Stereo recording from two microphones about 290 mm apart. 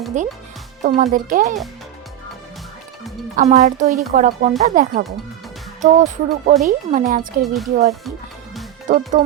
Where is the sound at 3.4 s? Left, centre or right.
Right.